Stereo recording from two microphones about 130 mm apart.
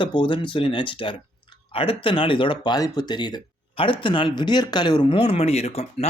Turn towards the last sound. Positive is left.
turn(degrees=50)  # may be behind; listen again after turning